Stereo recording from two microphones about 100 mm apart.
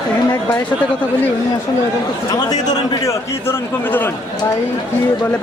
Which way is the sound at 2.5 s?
35° left (ahead or behind).